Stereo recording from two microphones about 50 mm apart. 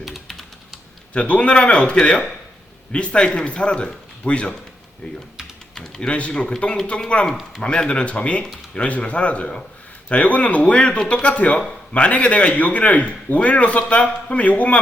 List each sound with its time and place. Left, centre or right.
0.0 s typing: centre
1.1 s a man's voice: left
5.7 s a man's voice: centre